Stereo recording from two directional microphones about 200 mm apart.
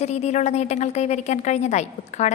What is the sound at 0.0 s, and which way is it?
A woman's voice, 35° left (ahead or behind).